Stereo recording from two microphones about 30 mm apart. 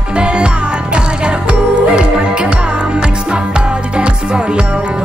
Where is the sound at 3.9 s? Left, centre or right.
Right.